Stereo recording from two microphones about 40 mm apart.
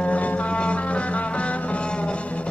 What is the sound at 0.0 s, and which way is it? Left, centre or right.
Music, left.